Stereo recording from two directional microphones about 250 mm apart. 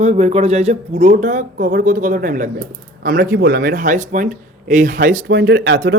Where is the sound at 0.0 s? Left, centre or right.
Right.